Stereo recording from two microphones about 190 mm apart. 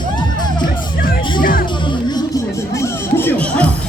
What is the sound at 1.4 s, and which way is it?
Music, 50° left (ahead or behind).